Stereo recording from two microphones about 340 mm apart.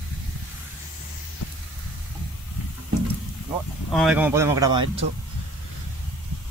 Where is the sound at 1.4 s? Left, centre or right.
Left.